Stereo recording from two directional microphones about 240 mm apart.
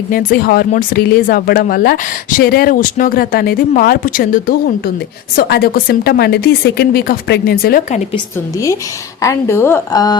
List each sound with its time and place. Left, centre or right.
0.1 s speech: left
8.5 s speech: centre